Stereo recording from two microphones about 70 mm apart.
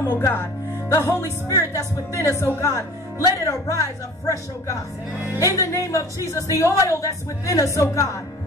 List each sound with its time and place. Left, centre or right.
0.0 s speech: left
5.4 s speech: left